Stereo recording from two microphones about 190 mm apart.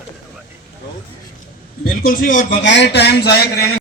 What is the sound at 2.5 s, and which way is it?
A man's voice, 70° left (ahead or behind).